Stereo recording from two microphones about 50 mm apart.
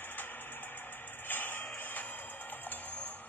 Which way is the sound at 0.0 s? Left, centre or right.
Left.